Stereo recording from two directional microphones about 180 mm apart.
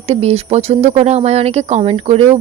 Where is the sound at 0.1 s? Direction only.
35° right (ahead or behind).